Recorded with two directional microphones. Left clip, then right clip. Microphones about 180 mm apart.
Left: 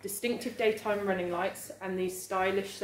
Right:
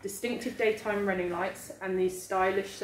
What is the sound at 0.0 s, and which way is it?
A woman's voice, 45° left (ahead or behind).